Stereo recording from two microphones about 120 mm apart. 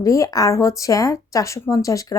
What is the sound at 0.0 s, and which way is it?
Speech, 25° left (ahead or behind).